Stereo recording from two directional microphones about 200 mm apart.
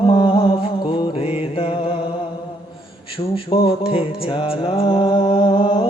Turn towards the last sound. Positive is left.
turn(degrees=25)  # may be behind; listen again after turning